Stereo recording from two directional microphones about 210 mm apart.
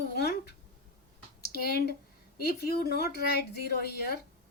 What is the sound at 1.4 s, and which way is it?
A woman's voice, 45° left (ahead or behind).